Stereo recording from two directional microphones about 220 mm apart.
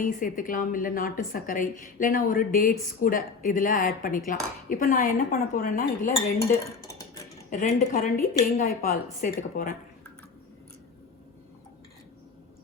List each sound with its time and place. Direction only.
0.0 s a woman's voice: 40° left (ahead or behind)
6.4 s speech: 15° left (ahead or behind)
7.5 s a woman's voice: 35° left (ahead or behind)